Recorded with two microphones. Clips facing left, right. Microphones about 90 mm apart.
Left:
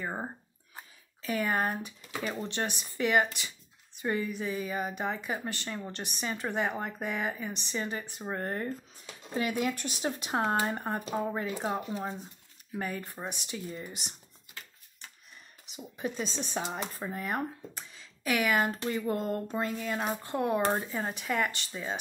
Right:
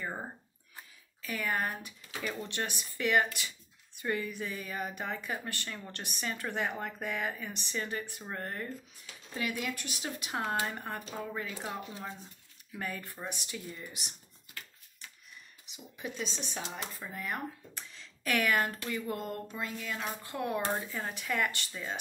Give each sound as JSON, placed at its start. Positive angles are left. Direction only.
{"t": 0.0, "sound": "a sound", "side_deg": 20}
{"t": 0.7, "sound": "speech", "side_deg": 25}
{"t": 12.7, "sound": "speech", "side_deg": 20}
{"t": 15.7, "sound": "speech", "side_deg": 40}
{"t": 17.7, "sound": "a sound", "side_deg": 15}
{"t": 18.7, "sound": "speech", "side_deg": 25}
{"t": 20.9, "sound": "speech", "side_deg": 20}